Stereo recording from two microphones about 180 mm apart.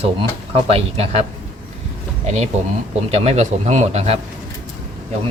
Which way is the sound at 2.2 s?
40° right (ahead or behind).